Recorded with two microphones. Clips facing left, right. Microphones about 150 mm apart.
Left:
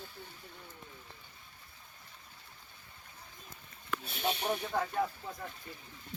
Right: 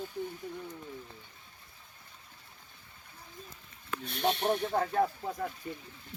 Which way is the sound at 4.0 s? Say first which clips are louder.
Right 6 dB; centre (ahead or behind).